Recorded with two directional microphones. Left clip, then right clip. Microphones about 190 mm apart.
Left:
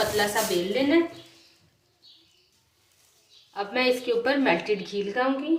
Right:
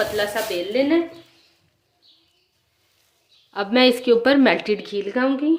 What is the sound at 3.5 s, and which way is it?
A woman's voice, 55° right (ahead or behind).